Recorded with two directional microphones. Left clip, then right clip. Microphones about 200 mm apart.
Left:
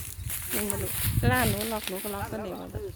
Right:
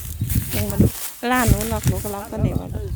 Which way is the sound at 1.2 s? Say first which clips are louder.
Right 6 dB; 45° right (ahead or behind).